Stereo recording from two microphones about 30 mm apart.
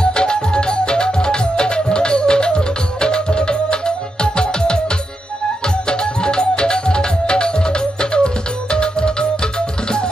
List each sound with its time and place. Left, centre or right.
0.0 s music: left
5.9 s music: left